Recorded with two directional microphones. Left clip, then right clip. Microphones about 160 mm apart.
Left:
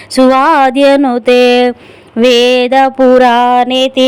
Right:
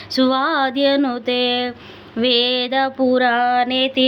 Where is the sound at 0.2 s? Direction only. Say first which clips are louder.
Left 11 dB; 50° left (ahead or behind).